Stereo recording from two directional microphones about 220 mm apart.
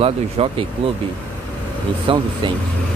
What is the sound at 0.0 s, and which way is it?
Speech, 25° right (ahead or behind).